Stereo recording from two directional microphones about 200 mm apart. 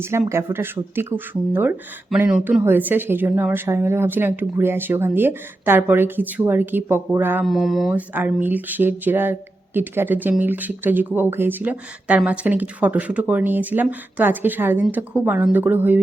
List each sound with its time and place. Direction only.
0.0 s speech: 10° right (ahead or behind)